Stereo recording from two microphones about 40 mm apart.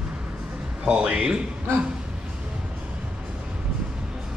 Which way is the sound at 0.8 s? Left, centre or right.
Right.